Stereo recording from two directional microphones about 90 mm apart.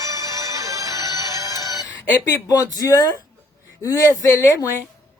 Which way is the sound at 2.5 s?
40° left (ahead or behind).